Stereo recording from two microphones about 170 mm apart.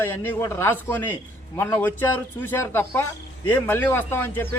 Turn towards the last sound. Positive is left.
turn(degrees=15)  # may be behind; listen again after turning